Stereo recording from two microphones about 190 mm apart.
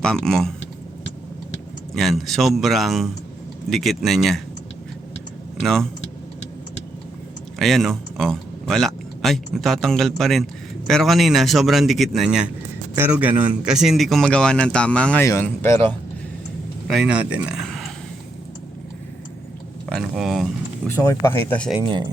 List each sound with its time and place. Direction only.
0.0 s speech: 5° left (ahead or behind)
1.9 s speech: centre (ahead or behind)
5.5 s speech: centre (ahead or behind)
7.6 s speech: centre (ahead or behind)
16.9 s speech: 5° right (ahead or behind)
19.9 s speech: centre (ahead or behind)
20.9 s speech: 10° left (ahead or behind)